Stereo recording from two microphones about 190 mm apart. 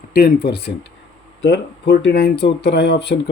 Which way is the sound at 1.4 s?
65° left (ahead or behind).